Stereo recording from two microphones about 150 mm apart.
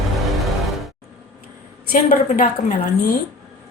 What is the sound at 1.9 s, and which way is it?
Speech, 60° left (ahead or behind).